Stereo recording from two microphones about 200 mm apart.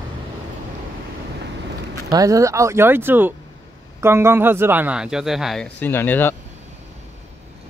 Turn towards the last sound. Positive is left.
turn(degrees=10)  # may be behind; listen again after turning